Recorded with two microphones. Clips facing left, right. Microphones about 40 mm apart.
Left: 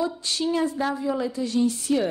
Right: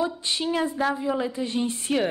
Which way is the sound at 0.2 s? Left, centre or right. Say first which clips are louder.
Left 1 dB; right.